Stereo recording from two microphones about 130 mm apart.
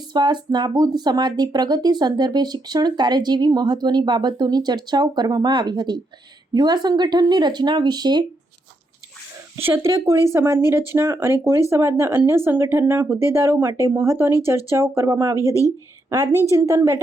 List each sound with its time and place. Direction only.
0.1 s speech: 35° right (ahead or behind)
9.6 s speech: 15° right (ahead or behind)